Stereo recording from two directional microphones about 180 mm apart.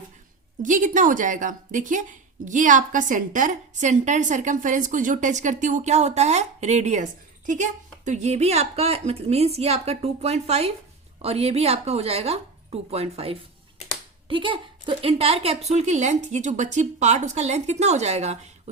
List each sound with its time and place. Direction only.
0.6 s a woman's voice: 45° right (ahead or behind)